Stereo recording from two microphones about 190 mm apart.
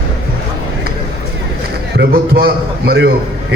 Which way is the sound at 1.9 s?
55° right (ahead or behind).